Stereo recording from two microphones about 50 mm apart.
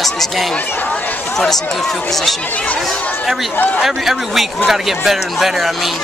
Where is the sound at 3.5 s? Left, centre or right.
Left.